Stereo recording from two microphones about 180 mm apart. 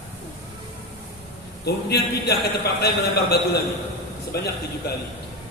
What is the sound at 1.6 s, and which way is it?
Speech, 65° left (ahead or behind).